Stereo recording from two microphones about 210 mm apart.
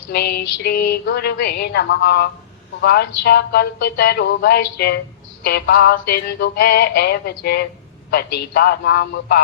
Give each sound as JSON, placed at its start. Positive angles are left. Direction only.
{"t": 0.1, "sound": "music", "side_deg": 50}